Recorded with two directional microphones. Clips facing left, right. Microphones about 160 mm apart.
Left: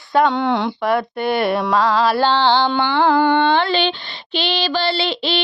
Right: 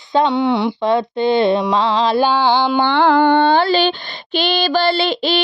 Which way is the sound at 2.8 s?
65° right (ahead or behind).